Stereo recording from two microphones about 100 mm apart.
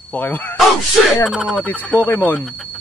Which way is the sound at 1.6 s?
15° left (ahead or behind).